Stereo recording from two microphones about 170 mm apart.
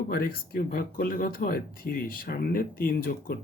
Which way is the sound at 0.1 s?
65° left (ahead or behind).